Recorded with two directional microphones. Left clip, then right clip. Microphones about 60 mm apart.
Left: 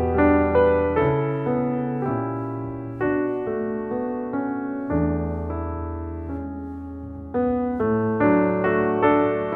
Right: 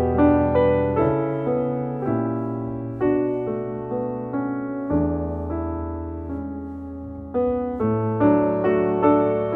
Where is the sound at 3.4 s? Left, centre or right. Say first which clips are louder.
Left 1 dB; right.